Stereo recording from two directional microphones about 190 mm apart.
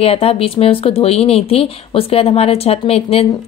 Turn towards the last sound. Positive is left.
turn(degrees=30)  # may be behind; listen again after turning